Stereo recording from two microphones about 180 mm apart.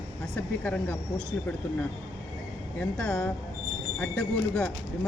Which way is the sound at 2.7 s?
5° left (ahead or behind).